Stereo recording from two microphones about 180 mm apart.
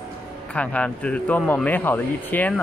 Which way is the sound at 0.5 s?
5° left (ahead or behind).